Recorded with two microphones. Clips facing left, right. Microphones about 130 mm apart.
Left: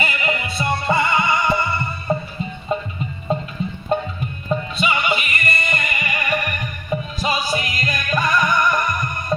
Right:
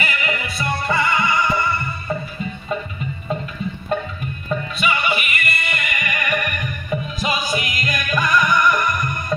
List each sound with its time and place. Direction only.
0.0 s music: 25° left (ahead or behind)
3.3 s music: 30° left (ahead or behind)